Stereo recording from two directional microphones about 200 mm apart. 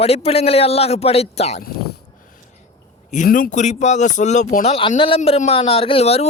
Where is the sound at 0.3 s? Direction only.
30° left (ahead or behind).